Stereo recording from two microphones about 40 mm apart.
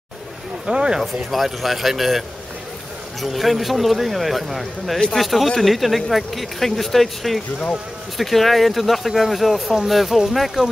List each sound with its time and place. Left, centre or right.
0.7 s speech: centre
1.0 s speech: centre